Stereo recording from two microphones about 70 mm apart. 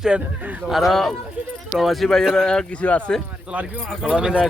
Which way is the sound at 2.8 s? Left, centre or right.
Centre.